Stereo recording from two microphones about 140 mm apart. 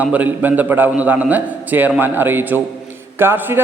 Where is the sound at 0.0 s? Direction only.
10° right (ahead or behind).